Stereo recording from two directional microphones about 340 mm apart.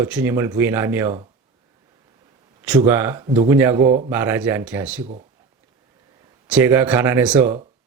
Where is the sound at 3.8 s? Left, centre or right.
Right.